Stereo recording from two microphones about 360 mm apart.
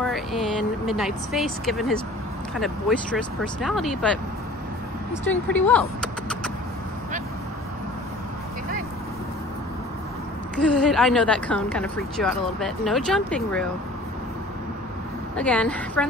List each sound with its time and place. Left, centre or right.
0.0 s speech: centre
5.2 s speech: centre
10.5 s speech: centre
15.3 s speech: centre